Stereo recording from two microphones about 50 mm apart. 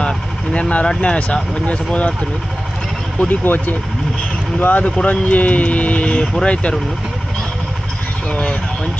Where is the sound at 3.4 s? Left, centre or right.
Left.